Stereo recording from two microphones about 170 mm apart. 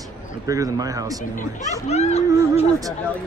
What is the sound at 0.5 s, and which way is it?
Speech, 20° right (ahead or behind).